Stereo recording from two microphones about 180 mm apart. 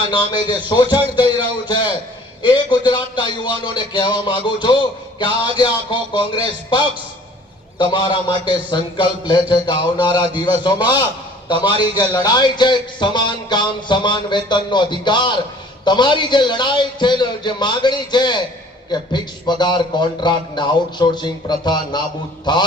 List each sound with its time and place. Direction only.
0.1 s speech: 25° left (ahead or behind)